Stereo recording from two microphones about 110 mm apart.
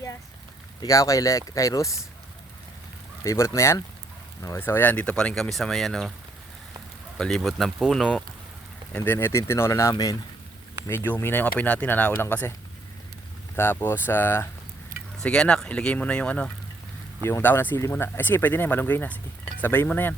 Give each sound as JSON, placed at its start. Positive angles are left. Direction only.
{"t": 0.8, "sound": "speech", "side_deg": 30}
{"t": 3.2, "sound": "speech", "side_deg": 25}
{"t": 7.2, "sound": "speech", "side_deg": 5}
{"t": 9.0, "sound": "speech", "side_deg": 20}
{"t": 9.9, "sound": "speech", "side_deg": 35}
{"t": 10.8, "sound": "speech", "side_deg": 20}
{"t": 13.6, "sound": "speech", "side_deg": 20}
{"t": 15.2, "sound": "speech", "side_deg": 10}
{"t": 17.2, "sound": "speech", "side_deg": 20}